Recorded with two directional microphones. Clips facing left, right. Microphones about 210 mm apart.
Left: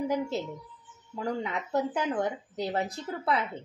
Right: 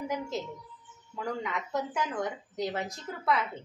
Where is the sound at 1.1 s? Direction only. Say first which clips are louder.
Left 2 dB; 30° left (ahead or behind).